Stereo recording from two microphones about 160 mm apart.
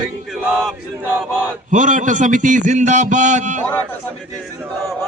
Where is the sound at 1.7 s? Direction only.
50° right (ahead or behind).